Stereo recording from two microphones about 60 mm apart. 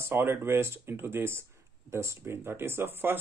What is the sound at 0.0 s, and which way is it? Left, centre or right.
Speech, right.